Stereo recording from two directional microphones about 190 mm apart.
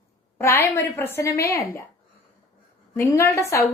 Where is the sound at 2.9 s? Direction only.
15° left (ahead or behind).